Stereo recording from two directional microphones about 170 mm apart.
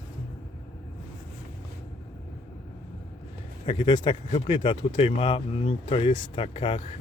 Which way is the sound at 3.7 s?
25° left (ahead or behind).